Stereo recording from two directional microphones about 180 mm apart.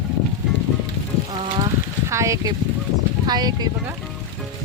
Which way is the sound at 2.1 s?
15° right (ahead or behind).